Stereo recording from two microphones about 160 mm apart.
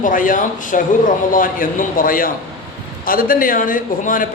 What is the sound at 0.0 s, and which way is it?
A man's voice, 55° left (ahead or behind).